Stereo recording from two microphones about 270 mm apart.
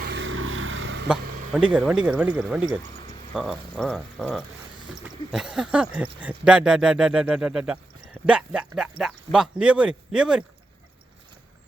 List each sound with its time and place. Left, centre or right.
0.0 s vehicle: right
1.5 s speech: centre